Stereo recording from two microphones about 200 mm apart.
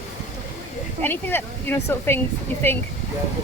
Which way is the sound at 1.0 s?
10° left (ahead or behind).